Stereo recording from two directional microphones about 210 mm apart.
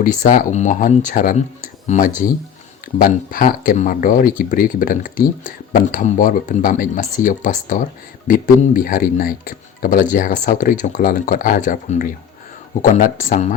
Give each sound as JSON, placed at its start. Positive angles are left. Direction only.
{"t": 0.0, "sound": "speech", "side_deg": 40}